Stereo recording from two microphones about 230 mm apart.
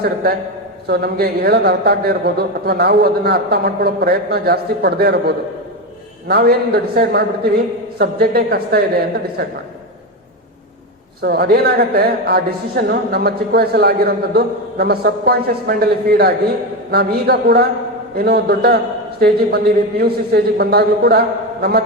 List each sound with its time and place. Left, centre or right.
0.0 s a man's voice: right
11.2 s a man's voice: right